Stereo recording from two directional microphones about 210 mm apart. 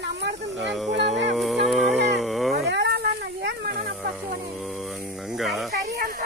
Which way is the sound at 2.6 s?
55° right (ahead or behind).